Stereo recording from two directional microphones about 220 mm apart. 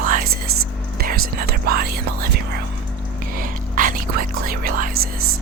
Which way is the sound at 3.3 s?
40° right (ahead or behind).